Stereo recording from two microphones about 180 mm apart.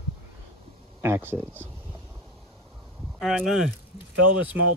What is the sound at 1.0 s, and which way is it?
Speech, 10° right (ahead or behind).